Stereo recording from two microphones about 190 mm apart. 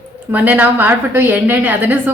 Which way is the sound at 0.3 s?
10° right (ahead or behind).